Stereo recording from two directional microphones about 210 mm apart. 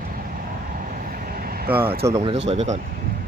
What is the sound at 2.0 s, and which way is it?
Speech, 15° right (ahead or behind).